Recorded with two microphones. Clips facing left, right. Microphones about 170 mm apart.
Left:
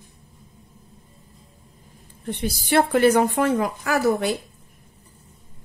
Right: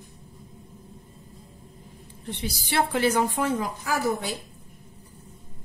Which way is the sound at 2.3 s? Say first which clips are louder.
Left 8 dB; 50° left (ahead or behind).